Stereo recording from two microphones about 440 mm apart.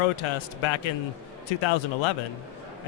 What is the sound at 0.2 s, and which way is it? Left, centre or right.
Speech, left.